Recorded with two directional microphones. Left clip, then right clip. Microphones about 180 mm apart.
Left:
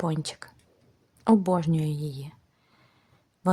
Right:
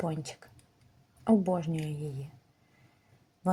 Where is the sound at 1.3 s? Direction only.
25° left (ahead or behind).